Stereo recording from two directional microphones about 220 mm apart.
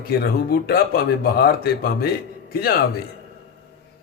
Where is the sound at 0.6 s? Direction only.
45° left (ahead or behind).